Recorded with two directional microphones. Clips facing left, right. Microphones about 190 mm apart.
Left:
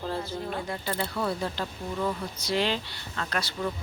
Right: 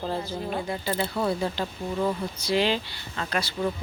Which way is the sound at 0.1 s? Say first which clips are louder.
Right 2 dB; 15° right (ahead or behind).